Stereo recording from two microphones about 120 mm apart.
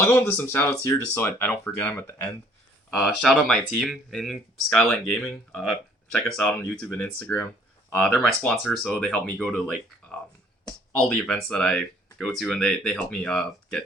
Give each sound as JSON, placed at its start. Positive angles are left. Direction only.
{"t": 0.0, "sound": "speech", "side_deg": 20}
{"t": 3.0, "sound": "speech", "side_deg": 5}
{"t": 10.9, "sound": "speech", "side_deg": 5}